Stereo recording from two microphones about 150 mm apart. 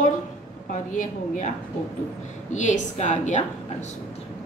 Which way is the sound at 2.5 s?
50° left (ahead or behind).